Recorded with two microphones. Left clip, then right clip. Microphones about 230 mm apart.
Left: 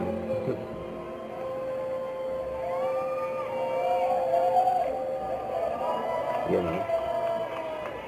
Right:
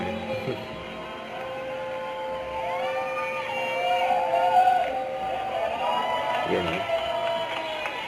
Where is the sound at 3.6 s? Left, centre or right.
Centre.